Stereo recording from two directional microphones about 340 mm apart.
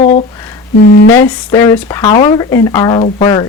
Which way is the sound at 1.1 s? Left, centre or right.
Centre.